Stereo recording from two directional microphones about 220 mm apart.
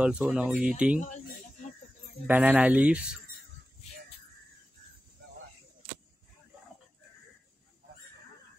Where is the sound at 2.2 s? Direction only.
5° right (ahead or behind).